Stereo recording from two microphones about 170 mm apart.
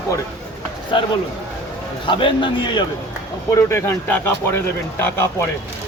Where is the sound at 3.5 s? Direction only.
15° left (ahead or behind).